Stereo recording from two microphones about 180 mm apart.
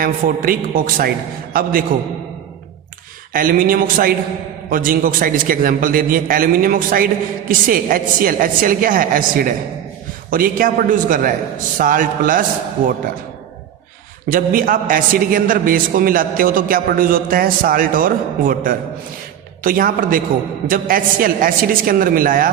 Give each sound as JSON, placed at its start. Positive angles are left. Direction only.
{"t": 0.0, "sound": "a man's voice", "side_deg": -50}
{"t": 3.3, "sound": "a man's voice", "side_deg": -50}
{"t": 14.3, "sound": "a man's voice", "side_deg": -50}